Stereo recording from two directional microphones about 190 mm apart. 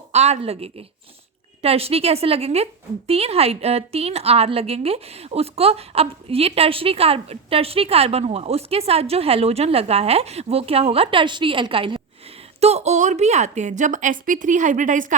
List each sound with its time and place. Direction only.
0.1 s a woman's voice: 35° right (ahead or behind)